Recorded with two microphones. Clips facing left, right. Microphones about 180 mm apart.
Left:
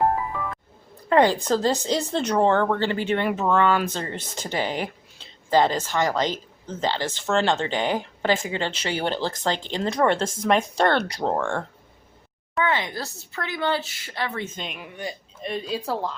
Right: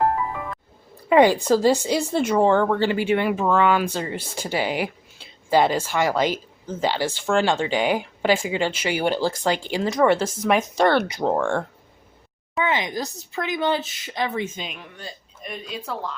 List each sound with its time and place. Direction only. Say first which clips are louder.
1.1 s speech: right 3 dB; 15° right (ahead or behind)
12.6 s speech: right 2 dB; 15° right (ahead or behind)
14.6 s speech: even; centre (ahead or behind)
15.4 s speech: left 5 dB; 30° left (ahead or behind)